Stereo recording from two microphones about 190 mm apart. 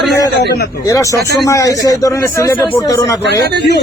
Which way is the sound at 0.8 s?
15° left (ahead or behind).